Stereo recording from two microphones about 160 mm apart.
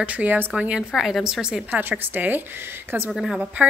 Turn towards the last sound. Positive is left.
turn(degrees=-5)  # may be behind; listen again after turning